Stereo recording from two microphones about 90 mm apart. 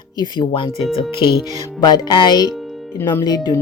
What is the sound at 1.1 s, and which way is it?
Speech, 70° left (ahead or behind).